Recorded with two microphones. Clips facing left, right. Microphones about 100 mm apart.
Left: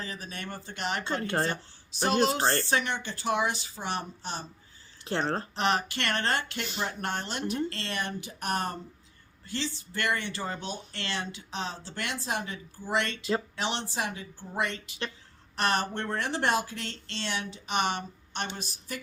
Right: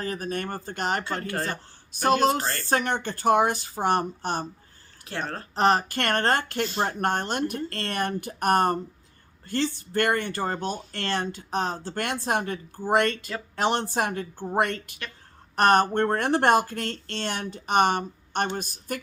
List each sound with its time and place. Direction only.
0.0 s speech: 50° right (ahead or behind)
1.3 s speech: 25° left (ahead or behind)
1.9 s speech: 50° right (ahead or behind)
2.4 s speech: 35° left (ahead or behind)
2.6 s speech: 45° right (ahead or behind)
5.1 s speech: 25° left (ahead or behind)
5.5 s speech: 40° right (ahead or behind)